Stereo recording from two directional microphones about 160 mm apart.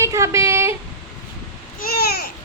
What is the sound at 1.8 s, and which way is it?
Babbling, 75° left (ahead or behind).